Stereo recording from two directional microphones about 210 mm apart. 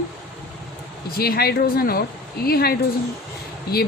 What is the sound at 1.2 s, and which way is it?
A woman's voice, 45° left (ahead or behind).